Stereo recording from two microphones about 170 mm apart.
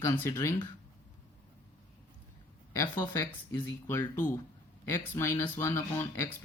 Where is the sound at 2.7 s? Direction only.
20° left (ahead or behind).